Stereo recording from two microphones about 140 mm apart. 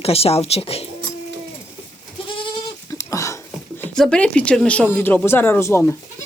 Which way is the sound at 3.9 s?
5° left (ahead or behind).